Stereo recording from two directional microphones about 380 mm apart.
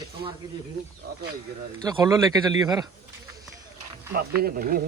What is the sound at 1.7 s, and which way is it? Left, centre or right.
Speech, centre.